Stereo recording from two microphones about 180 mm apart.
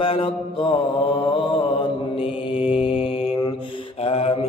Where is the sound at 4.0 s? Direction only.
30° left (ahead or behind).